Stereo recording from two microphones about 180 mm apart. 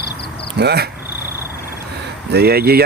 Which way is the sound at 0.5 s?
65° right (ahead or behind).